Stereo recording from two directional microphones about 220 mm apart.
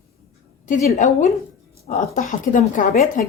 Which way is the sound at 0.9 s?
30° left (ahead or behind).